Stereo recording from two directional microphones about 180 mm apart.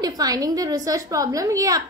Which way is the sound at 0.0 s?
20° right (ahead or behind).